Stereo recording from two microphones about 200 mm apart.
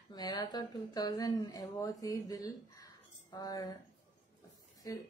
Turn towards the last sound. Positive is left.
turn(degrees=15)  # may be behind; listen again after turning